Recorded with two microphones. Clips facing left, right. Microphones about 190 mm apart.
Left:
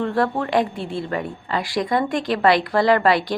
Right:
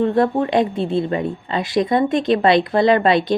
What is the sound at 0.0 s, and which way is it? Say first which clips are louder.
A woman's voice: right 5 dB; 20° right (ahead or behind).